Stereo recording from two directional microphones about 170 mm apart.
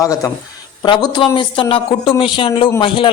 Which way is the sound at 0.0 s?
20° left (ahead or behind).